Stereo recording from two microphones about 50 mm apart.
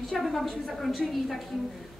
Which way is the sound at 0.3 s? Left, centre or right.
Centre.